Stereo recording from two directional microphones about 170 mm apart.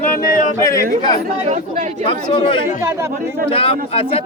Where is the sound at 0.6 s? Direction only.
15° left (ahead or behind).